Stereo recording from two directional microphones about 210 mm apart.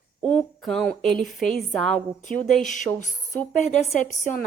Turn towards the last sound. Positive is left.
turn(degrees=35)  # may be behind; listen again after turning